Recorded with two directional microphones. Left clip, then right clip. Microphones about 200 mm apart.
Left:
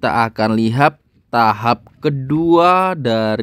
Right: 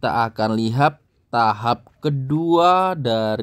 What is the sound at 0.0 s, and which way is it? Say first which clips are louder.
Speech: left 4 dB; 30° left (ahead or behind).